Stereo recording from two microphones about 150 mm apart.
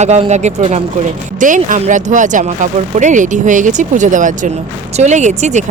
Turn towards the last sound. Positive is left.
turn(degrees=-50)  # may be behind; listen again after turning